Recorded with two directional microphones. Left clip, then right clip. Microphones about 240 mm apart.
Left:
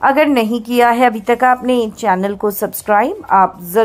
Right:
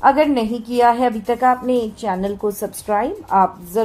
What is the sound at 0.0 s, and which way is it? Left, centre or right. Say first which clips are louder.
A woman's voice: left 2 dB; left.